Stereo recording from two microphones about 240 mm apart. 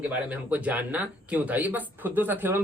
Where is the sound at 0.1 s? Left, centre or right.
Centre.